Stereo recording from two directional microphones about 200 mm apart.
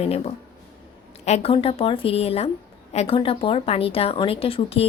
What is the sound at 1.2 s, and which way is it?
A woman's voice, 30° left (ahead or behind).